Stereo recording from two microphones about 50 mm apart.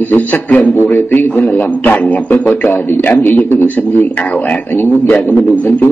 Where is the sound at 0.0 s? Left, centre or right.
Left.